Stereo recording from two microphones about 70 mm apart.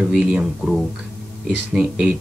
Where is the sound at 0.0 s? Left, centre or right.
Centre.